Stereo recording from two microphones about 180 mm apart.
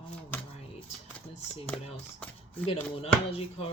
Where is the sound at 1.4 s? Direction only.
5° left (ahead or behind).